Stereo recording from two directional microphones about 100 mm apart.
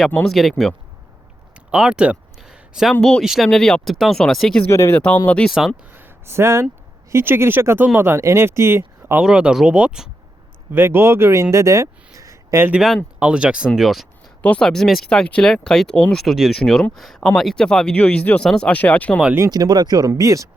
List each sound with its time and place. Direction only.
0.3 s speech: centre (ahead or behind)
1.7 s a sound: 10° right (ahead or behind)
3.0 s speech: 5° left (ahead or behind)
4.7 s speech: 30° left (ahead or behind)
4.9 s speech: 15° left (ahead or behind)
5.5 s speech: 5° right (ahead or behind)
5.9 s a sound: 20° right (ahead or behind)
7.1 s speech: 25° right (ahead or behind)
9.2 s speech: 10° right (ahead or behind)
10.7 s speech: 20° right (ahead or behind)
11.5 s a sound: 30° right (ahead or behind)
13.1 s speech: 10° right (ahead or behind)
14.4 s speech: 10° left (ahead or behind)
19.5 s speech: 40° right (ahead or behind)